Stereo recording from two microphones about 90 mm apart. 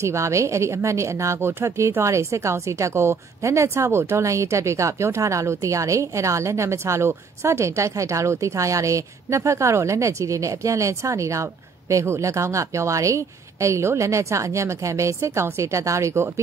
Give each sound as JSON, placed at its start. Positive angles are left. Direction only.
{"t": 0.0, "sound": "a woman's voice", "side_deg": -35}